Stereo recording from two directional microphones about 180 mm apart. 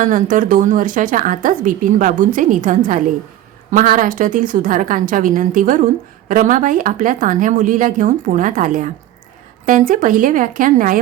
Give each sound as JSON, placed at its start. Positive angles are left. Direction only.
{"t": 0.0, "sound": "a woman's voice", "side_deg": -45}